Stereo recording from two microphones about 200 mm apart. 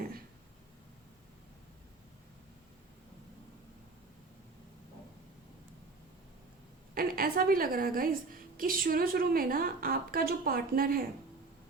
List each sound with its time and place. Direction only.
6.9 s a woman's voice: 45° right (ahead or behind)